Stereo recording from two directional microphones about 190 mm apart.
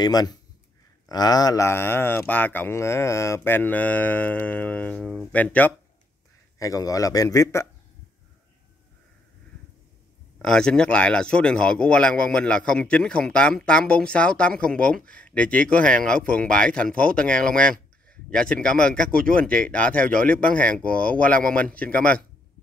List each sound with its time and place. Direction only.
0.0 s speech: 20° left (ahead or behind)
10.4 s speech: 5° left (ahead or behind)